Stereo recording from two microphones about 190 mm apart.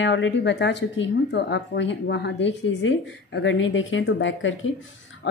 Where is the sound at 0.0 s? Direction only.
70° left (ahead or behind).